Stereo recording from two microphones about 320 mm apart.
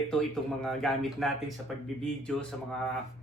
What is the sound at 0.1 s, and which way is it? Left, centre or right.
A man's voice, centre.